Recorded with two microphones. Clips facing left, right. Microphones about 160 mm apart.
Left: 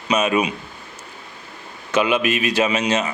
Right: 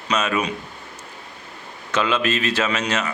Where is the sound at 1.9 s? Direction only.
15° left (ahead or behind).